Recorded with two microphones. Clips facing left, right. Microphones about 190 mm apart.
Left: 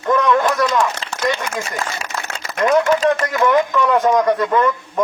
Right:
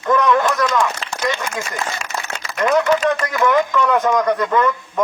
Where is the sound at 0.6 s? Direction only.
25° left (ahead or behind).